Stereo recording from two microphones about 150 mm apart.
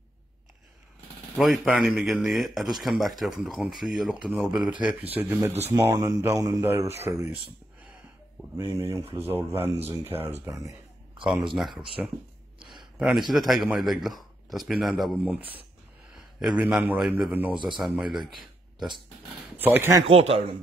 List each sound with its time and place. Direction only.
1.4 s a man's voice: centre (ahead or behind); by 6.9 s 20° right (ahead or behind)
8.5 s a man's voice: 20° right (ahead or behind)
11.1 s a man's voice: centre (ahead or behind)
12.7 s a sound: centre (ahead or behind)
13.3 s a man's voice: centre (ahead or behind)
16.3 s a man's voice: 10° right (ahead or behind)
19.6 s a man's voice: 15° right (ahead or behind)
20.1 s speech: 40° right (ahead or behind)